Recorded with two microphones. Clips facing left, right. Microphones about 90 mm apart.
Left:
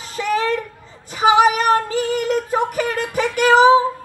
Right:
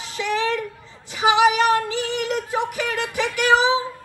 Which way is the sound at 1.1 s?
40° left (ahead or behind).